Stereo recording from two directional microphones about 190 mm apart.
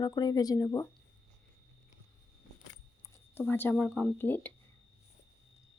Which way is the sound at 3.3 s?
10° left (ahead or behind).